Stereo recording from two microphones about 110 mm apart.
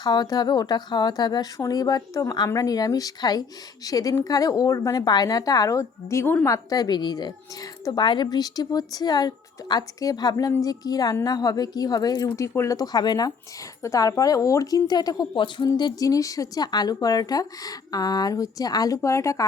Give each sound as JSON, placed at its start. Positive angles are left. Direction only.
{"t": 0.0, "sound": "a woman's voice", "side_deg": 40}